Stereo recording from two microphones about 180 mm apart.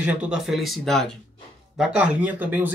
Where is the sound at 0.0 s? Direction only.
5° right (ahead or behind).